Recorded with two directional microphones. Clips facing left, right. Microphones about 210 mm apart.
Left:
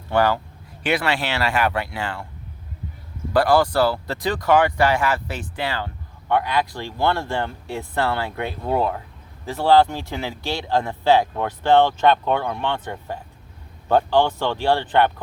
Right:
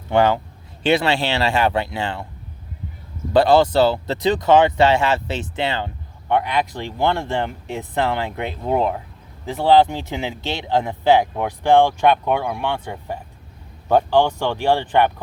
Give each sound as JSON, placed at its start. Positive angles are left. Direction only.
{"t": 0.1, "sound": "speech", "side_deg": -20}
{"t": 3.3, "sound": "speech", "side_deg": -25}